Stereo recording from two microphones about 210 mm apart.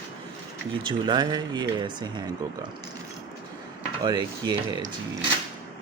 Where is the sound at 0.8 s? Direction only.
20° right (ahead or behind).